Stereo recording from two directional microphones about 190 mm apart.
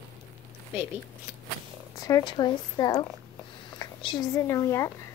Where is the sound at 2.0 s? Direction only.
20° left (ahead or behind).